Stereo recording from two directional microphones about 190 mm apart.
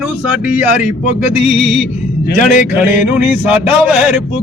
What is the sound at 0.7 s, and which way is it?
Speech, 35° left (ahead or behind).